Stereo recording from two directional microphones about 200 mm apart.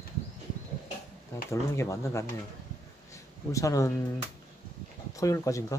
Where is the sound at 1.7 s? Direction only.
15° left (ahead or behind).